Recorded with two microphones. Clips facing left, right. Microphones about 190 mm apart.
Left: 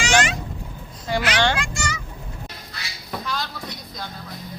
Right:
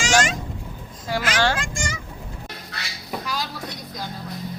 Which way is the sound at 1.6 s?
50° right (ahead or behind).